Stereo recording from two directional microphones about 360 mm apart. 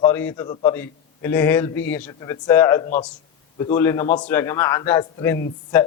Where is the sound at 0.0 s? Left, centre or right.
Centre.